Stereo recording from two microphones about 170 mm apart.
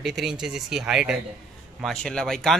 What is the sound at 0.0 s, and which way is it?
Speech, centre (ahead or behind).